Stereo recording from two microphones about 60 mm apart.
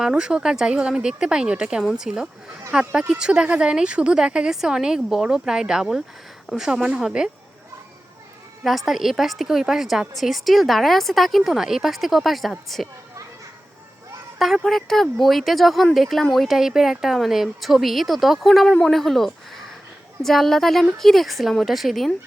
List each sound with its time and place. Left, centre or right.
0.0 s speech: centre
1.8 s a woman's voice: centre
6.7 s a woman's voice: centre
8.6 s a woman's voice: centre
14.3 s a woman's voice: centre